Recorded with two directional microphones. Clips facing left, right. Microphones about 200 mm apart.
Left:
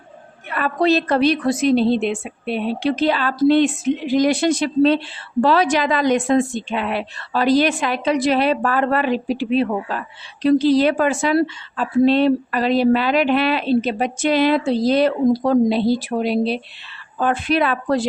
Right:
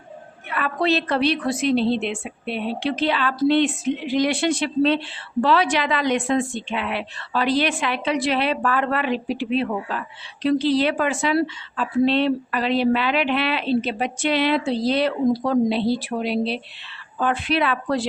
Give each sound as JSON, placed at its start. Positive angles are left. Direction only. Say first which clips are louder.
{"t": 0.5, "sound": "a woman's voice", "louder": "left 4 dB", "side_deg": 40}